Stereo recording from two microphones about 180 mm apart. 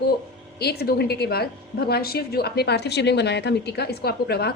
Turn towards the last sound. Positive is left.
turn(degrees=60)  # may be behind; listen again after turning